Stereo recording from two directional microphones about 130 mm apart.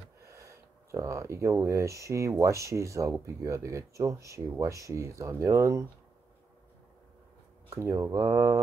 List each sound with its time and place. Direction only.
0.2 s speech: 25° right (ahead or behind)
7.7 s speech: 20° right (ahead or behind)